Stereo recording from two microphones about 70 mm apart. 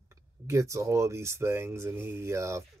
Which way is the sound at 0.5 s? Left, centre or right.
Right.